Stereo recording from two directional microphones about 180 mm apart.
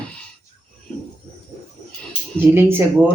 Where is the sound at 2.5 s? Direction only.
10° right (ahead or behind).